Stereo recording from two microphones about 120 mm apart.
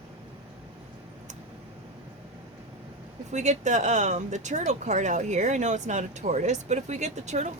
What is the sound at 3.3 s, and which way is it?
Speech, 75° right (ahead or behind).